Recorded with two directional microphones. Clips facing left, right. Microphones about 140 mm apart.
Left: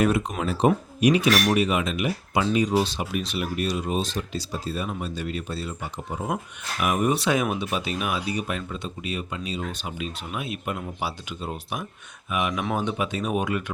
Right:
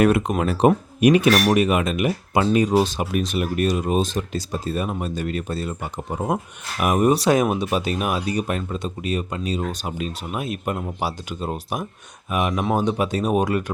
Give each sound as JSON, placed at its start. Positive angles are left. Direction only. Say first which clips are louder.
{"t": 0.0, "sound": "speech", "louder": "right 5 dB", "side_deg": -60}